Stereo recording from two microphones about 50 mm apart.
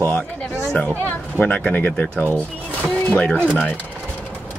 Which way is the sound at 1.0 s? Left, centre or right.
Left.